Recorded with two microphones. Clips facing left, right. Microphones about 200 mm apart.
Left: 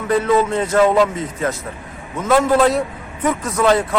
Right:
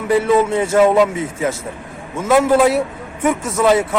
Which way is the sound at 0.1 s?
10° right (ahead or behind).